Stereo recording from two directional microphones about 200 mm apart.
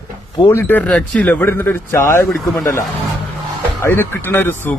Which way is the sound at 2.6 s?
10° left (ahead or behind).